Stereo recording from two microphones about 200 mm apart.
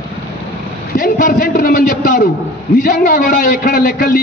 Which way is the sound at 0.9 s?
45° left (ahead or behind).